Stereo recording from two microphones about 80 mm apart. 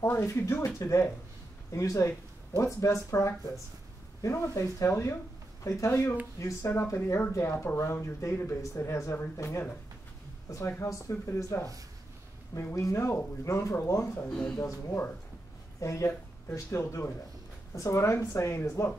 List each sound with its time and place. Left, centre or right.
0.0 s speech: left
0.3 s speech: left
5.9 s speech: left
10.8 s speech: left
12.7 s speech: left
14.3 s speech: centre
14.6 s speech: left